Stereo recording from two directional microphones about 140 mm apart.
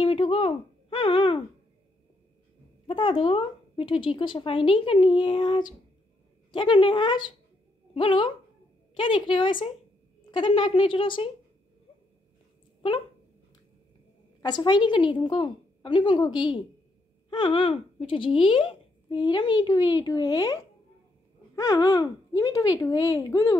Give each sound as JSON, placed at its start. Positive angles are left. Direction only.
{"t": 0.0, "sound": "a sound", "side_deg": 40}
{"t": 2.9, "sound": "speech", "side_deg": 40}
{"t": 14.4, "sound": "speech", "side_deg": 30}